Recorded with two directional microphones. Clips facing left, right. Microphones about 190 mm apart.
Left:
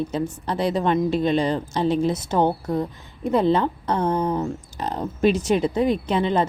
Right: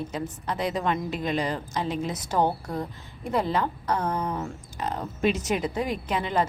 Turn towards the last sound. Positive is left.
turn(degrees=25)  # may be behind; listen again after turning